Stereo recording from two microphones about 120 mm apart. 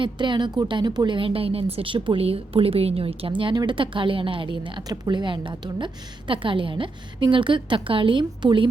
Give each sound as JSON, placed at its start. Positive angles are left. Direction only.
{"t": 0.0, "sound": "a woman's voice", "side_deg": -40}